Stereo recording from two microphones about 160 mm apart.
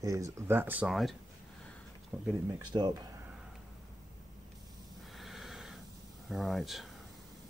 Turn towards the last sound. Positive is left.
turn(degrees=0)  # may be behind; listen again after turning